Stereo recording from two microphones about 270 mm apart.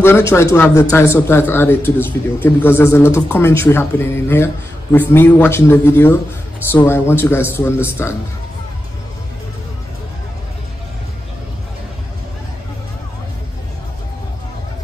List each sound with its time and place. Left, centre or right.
0.0 s speech: centre